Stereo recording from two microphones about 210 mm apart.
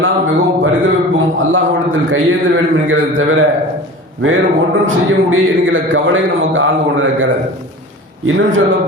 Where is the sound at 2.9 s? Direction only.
70° right (ahead or behind).